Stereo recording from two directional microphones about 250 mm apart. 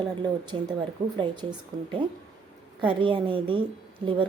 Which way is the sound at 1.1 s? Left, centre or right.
Centre.